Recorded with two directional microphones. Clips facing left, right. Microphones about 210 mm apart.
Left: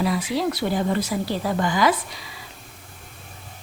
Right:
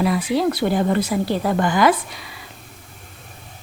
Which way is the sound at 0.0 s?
60° right (ahead or behind).